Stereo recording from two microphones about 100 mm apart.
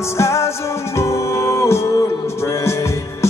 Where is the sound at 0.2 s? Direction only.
30° left (ahead or behind).